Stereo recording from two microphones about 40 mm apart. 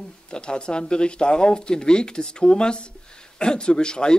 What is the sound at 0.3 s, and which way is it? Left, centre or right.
Speech, left.